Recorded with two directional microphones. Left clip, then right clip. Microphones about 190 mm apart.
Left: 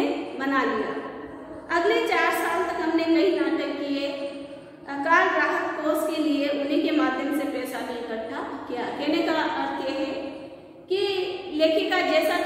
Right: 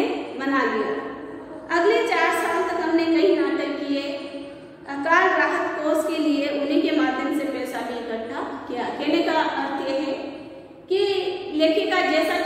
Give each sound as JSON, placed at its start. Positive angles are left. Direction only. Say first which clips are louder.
{"t": 0.0, "sound": "a sound", "louder": "right 1 dB", "side_deg": 0}
{"t": 1.7, "sound": "a woman's voice", "louder": "right 3 dB", "side_deg": 0}
{"t": 5.0, "sound": "a woman's voice", "louder": "right 2 dB", "side_deg": 0}
{"t": 8.7, "sound": "a woman's voice", "louder": "right 3 dB", "side_deg": 0}